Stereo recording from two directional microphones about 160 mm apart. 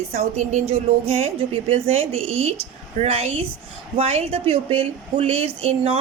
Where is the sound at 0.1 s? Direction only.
45° right (ahead or behind).